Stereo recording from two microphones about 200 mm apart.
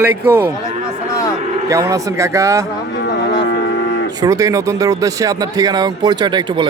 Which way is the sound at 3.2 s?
60° left (ahead or behind).